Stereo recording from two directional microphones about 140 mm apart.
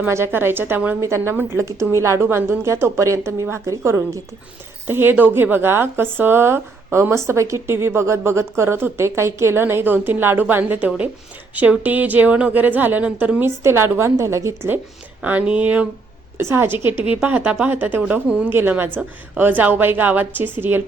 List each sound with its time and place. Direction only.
0.0 s a woman's voice: 15° right (ahead or behind)